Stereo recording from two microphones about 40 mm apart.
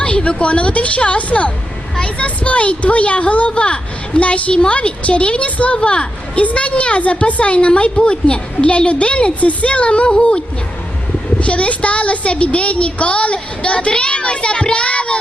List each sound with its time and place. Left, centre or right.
0.0 s a woman's voice: left